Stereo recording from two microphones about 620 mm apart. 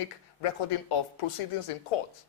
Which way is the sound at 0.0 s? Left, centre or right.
Left.